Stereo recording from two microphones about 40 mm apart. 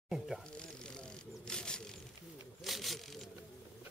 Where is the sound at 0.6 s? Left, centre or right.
Left.